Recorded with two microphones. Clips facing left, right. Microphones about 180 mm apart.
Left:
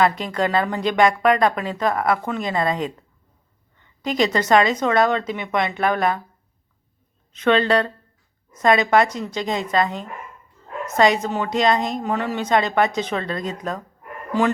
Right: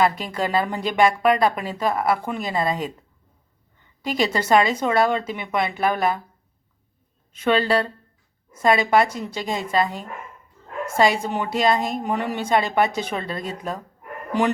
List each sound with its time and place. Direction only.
0.0 s speech: 5° right (ahead or behind)
4.0 s speech: 5° right (ahead or behind)
7.3 s speech: 10° right (ahead or behind)